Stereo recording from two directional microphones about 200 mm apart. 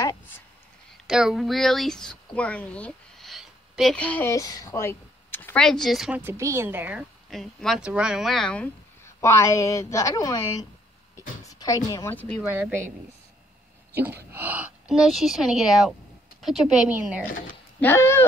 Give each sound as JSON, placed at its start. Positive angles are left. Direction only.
{"t": 0.0, "sound": "a sound", "side_deg": 15}
{"t": 1.0, "sound": "a woman's voice", "side_deg": 0}
{"t": 12.4, "sound": "a woman's voice", "side_deg": -10}
{"t": 13.9, "sound": "speech", "side_deg": -10}
{"t": 17.7, "sound": "speech", "side_deg": 10}